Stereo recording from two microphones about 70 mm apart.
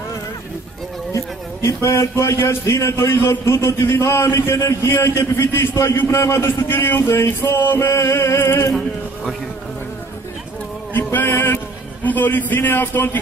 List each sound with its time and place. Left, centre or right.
1.1 s a man's voice: left
10.9 s a sound: left
12.0 s a man's voice: left